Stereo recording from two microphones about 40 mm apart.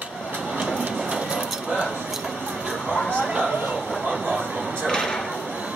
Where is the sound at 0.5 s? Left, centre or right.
Right.